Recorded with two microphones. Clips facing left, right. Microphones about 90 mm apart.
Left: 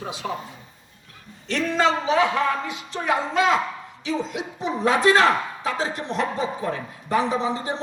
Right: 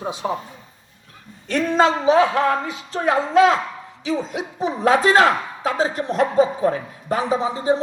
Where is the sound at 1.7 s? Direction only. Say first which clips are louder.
Right 5 dB; 35° right (ahead or behind).